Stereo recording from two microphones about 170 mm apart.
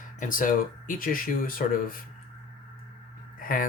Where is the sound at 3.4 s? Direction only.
55° left (ahead or behind).